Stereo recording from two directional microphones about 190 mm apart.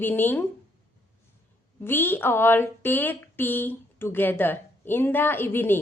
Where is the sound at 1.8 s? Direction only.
10° left (ahead or behind).